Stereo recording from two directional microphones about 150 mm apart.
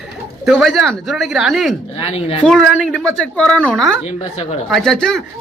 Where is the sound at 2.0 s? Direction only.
40° left (ahead or behind).